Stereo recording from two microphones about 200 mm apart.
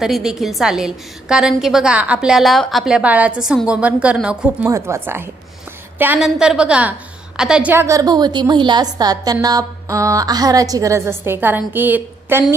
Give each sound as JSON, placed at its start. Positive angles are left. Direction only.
{"t": 0.0, "sound": "a woman's voice", "side_deg": 0}